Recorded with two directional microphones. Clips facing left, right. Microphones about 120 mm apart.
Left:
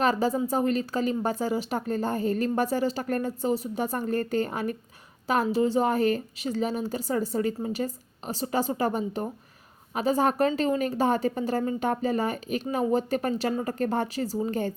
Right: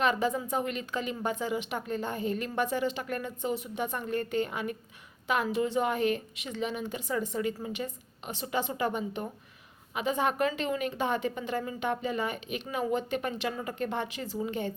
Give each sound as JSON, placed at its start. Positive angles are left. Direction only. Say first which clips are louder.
{"t": 0.0, "sound": "a woman's voice", "louder": "left 4 dB", "side_deg": 35}